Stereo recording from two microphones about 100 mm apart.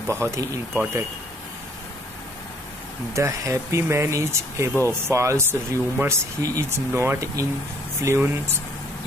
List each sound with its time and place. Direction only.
0.0 s speech: 25° right (ahead or behind)
3.1 s speech: 30° right (ahead or behind)